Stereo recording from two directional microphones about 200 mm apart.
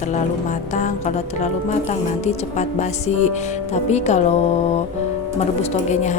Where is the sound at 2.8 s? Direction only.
35° left (ahead or behind).